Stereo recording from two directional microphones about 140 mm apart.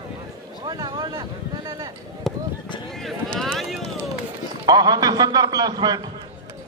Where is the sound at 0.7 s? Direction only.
30° right (ahead or behind).